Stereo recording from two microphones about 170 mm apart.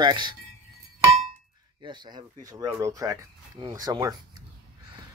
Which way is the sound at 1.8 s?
25° right (ahead or behind).